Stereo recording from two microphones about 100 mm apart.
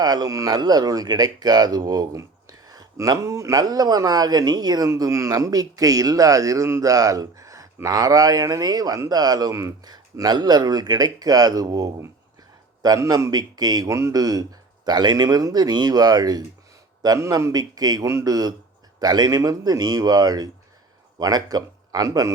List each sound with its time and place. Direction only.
0.0 s speech: 40° right (ahead or behind)
9.8 s speech: 40° right (ahead or behind)